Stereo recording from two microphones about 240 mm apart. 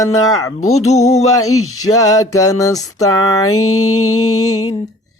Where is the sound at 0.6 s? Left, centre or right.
Left.